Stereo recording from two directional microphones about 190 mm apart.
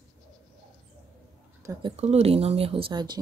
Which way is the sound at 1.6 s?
20° right (ahead or behind).